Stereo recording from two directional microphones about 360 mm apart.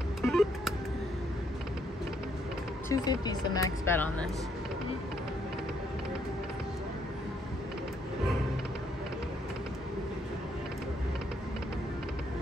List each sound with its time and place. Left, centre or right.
0.2 s music: centre
2.9 s speech: centre